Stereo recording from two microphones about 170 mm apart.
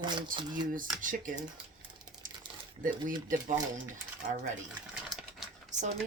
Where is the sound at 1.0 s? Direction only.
50° right (ahead or behind).